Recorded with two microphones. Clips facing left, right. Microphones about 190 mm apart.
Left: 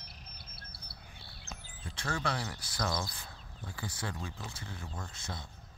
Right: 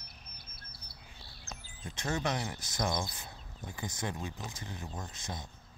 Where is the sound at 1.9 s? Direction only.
20° right (ahead or behind).